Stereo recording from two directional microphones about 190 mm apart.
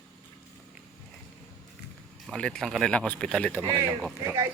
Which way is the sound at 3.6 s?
20° right (ahead or behind).